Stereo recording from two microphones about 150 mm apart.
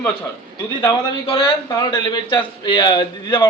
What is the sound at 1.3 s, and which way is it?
A man's voice, 35° left (ahead or behind).